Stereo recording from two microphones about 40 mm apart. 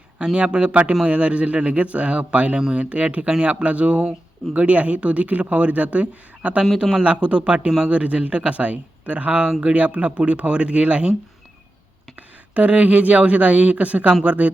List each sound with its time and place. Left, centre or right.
0.3 s a man's voice: right
9.5 s a man's voice: right
9.7 s a man's voice: right
12.5 s speech: right